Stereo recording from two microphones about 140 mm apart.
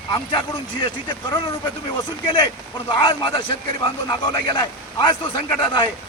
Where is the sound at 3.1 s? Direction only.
35° left (ahead or behind).